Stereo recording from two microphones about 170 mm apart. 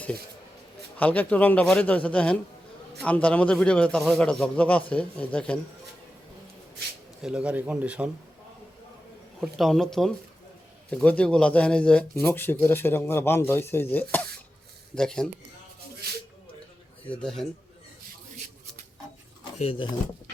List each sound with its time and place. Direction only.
0.9 s speech: 10° left (ahead or behind)
7.2 s a man's voice: 5° right (ahead or behind)
9.4 s speech: centre (ahead or behind)
17.1 s speech: 5° left (ahead or behind)
19.5 s speech: 35° left (ahead or behind)